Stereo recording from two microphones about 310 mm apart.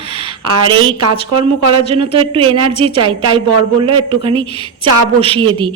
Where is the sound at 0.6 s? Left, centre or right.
Centre.